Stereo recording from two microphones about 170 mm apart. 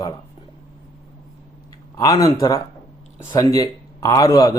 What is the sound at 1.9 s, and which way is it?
Speech, 20° left (ahead or behind).